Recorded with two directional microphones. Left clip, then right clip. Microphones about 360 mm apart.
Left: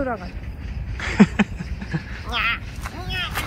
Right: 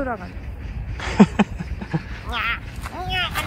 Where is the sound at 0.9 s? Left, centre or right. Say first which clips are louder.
Right 1 dB; centre.